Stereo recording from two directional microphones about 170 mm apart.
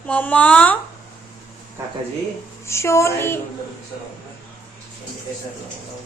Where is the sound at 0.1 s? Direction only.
10° left (ahead or behind).